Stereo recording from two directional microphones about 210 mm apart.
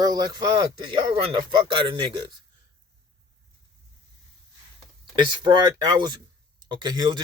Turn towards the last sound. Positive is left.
turn(degrees=-20)  # may be behind; listen again after turning